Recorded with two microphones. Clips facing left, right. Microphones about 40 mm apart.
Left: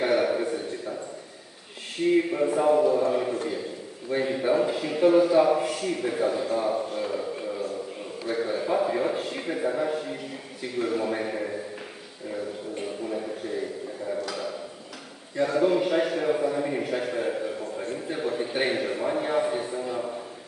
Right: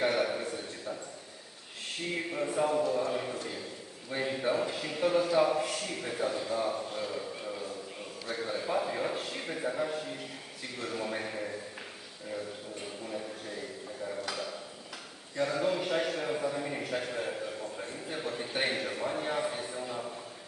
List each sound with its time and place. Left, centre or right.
0.0 s a sound: centre
2.0 s a man's voice: centre
2.6 s a man's voice: left
15.3 s a man's voice: centre